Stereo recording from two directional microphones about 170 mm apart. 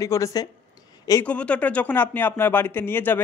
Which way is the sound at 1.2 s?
5° left (ahead or behind).